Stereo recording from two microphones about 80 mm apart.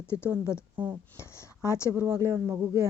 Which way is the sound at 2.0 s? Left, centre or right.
Right.